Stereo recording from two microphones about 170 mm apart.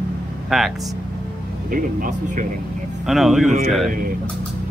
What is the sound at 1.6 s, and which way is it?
Speech, 55° right (ahead or behind).